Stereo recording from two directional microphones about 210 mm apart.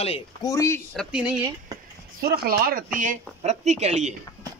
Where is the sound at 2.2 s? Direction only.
45° right (ahead or behind).